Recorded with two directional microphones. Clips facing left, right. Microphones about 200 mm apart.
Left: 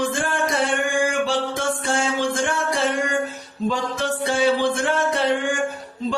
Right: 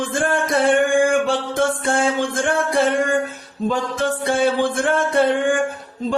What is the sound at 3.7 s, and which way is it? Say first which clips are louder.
Singing: right 3 dB; 55° right (ahead or behind).